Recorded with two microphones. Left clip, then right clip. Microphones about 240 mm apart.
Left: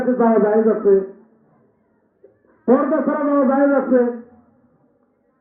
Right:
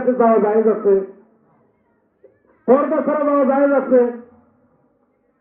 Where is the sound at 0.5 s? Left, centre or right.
Centre.